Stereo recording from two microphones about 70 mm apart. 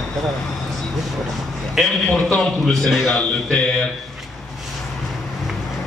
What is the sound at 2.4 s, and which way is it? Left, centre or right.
A man's voice, centre.